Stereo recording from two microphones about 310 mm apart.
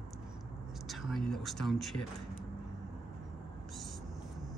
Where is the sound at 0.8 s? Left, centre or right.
Centre.